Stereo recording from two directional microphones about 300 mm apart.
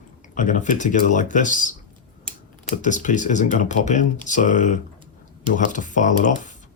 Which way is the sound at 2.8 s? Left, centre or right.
Left.